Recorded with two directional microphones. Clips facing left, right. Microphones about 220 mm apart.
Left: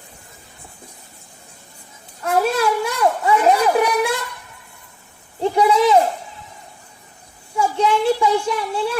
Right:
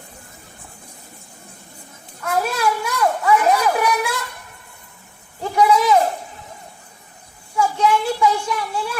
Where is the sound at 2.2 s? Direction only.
30° left (ahead or behind).